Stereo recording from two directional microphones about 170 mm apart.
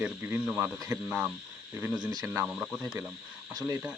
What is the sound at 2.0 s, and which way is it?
Speech, 20° right (ahead or behind).